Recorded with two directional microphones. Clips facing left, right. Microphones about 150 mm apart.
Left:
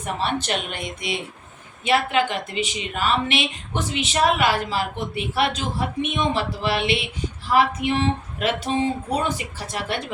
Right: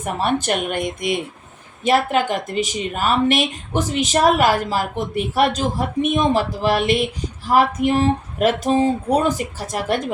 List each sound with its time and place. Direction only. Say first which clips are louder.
0.0 s speech: right 4 dB; 45° right (ahead or behind)